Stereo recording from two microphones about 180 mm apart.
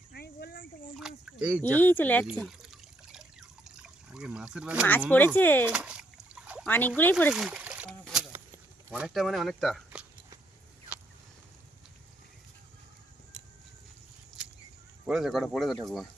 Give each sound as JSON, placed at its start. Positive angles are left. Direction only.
{"t": 0.1, "sound": "a sound", "side_deg": 60}
{"t": 0.9, "sound": "a sound", "side_deg": -5}
{"t": 1.6, "sound": "speech", "side_deg": 10}
{"t": 2.4, "sound": "water", "side_deg": 0}
{"t": 4.9, "sound": "speech", "side_deg": 10}
{"t": 5.6, "sound": "splash", "side_deg": -5}
{"t": 6.7, "sound": "speech", "side_deg": 10}
{"t": 7.3, "sound": "splash", "side_deg": 0}
{"t": 7.9, "sound": "a sound", "side_deg": 0}
{"t": 8.9, "sound": "speech", "side_deg": -5}
{"t": 15.0, "sound": "speech", "side_deg": -5}